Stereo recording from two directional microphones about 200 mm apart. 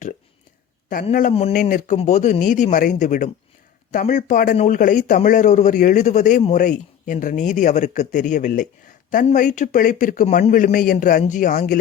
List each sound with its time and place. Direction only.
1.3 s speech: 30° left (ahead or behind); by 11.8 s 45° left (ahead or behind)